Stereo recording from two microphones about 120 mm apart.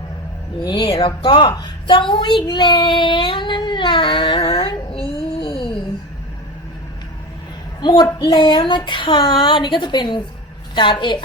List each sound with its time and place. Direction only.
0.6 s a woman's voice: 35° left (ahead or behind)
4.4 s a sound: 50° left (ahead or behind)
7.8 s a woman's voice: 35° left (ahead or behind)